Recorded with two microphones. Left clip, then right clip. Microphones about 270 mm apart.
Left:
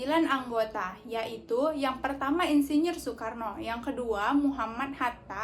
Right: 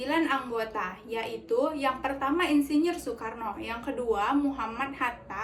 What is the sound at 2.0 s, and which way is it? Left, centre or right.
A woman's voice, centre.